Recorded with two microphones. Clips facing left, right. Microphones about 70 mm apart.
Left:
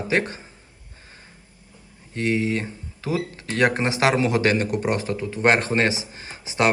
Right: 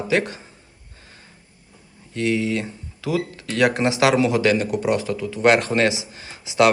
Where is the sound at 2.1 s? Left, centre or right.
Left.